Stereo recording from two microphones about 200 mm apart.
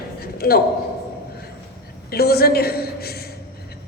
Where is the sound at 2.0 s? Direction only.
50° left (ahead or behind).